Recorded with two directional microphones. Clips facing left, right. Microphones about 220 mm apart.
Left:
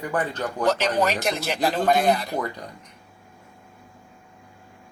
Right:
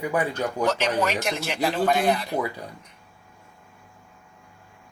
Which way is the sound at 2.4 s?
5° right (ahead or behind).